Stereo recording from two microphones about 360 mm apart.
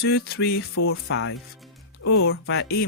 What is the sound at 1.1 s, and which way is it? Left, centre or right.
Speech, left.